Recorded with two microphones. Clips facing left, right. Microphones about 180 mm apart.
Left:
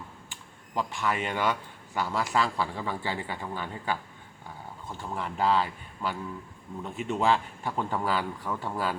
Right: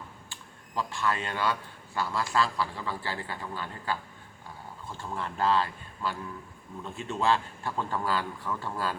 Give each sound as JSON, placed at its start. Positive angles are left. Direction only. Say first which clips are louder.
{"t": 0.8, "sound": "a man's voice", "louder": "left 1 dB", "side_deg": 15}